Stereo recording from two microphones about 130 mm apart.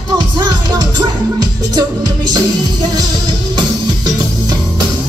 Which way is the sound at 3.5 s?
30° right (ahead or behind).